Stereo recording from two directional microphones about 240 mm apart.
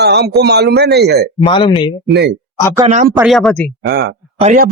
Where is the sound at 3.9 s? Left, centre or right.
Right.